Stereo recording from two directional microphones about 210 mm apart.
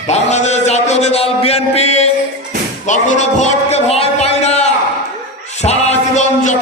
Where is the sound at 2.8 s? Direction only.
35° left (ahead or behind).